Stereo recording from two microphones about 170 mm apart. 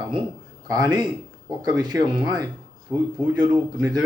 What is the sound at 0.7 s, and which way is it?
Speech, 20° right (ahead or behind).